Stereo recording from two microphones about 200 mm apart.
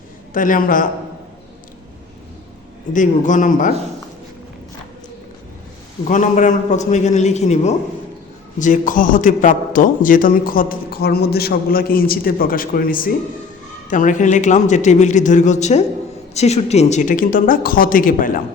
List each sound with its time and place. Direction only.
0.3 s a man's voice: 40° left (ahead or behind)
2.9 s speech: 40° left (ahead or behind)
6.1 s a man's voice: 40° left (ahead or behind)